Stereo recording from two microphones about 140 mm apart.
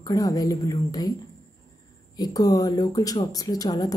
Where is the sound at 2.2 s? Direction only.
25° left (ahead or behind).